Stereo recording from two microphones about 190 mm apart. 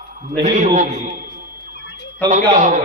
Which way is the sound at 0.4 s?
40° right (ahead or behind).